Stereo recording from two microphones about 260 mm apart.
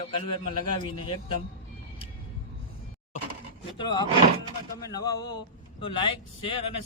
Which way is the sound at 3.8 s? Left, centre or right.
Centre.